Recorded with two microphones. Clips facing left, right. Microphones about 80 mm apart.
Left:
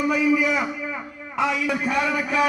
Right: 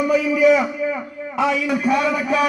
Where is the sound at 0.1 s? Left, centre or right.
Centre.